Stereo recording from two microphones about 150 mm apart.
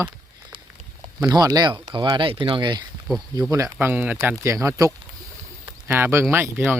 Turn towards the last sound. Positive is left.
turn(degrees=-15)  # may be behind; listen again after turning